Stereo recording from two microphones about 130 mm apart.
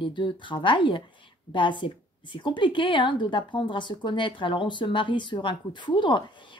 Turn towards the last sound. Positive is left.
turn(degrees=35)  # may be behind; listen again after turning